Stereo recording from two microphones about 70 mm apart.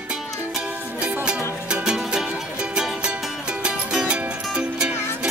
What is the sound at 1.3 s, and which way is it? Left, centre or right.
Music, centre.